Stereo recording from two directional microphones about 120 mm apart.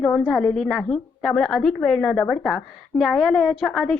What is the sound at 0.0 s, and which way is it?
Speech, 10° left (ahead or behind).